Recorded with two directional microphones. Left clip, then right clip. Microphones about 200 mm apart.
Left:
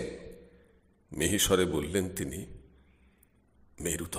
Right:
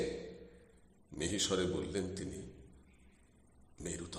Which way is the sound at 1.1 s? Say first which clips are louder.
Left 9 dB; 30° left (ahead or behind).